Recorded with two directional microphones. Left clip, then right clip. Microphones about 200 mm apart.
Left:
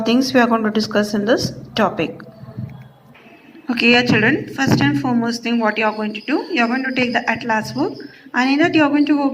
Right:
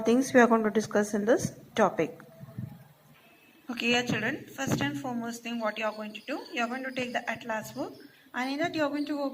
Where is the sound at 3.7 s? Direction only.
30° right (ahead or behind).